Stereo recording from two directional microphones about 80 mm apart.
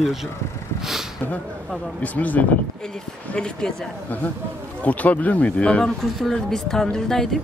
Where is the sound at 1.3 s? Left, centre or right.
Centre.